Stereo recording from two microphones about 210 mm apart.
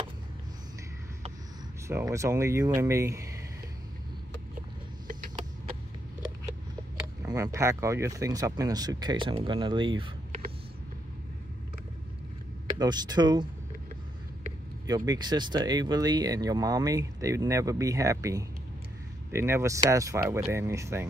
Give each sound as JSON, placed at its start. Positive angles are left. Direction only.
{"t": 1.9, "sound": "speech", "side_deg": -15}
{"t": 7.2, "sound": "speech", "side_deg": -15}
{"t": 12.7, "sound": "speech", "side_deg": -20}
{"t": 14.9, "sound": "speech", "side_deg": -20}